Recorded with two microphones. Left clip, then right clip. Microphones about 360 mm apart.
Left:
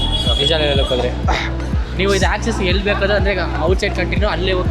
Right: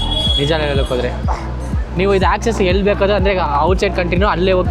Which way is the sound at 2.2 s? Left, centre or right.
Right.